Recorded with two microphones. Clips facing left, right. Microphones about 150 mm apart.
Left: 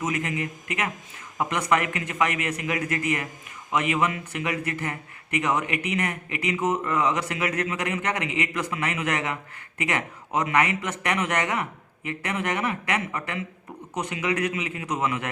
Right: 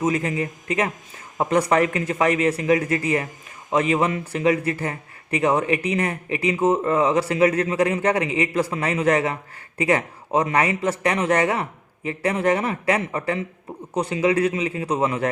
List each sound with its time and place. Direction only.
0.0 s a man's voice: 30° right (ahead or behind)